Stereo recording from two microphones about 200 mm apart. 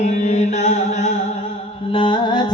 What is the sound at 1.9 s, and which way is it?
Carnatic music, 25° left (ahead or behind).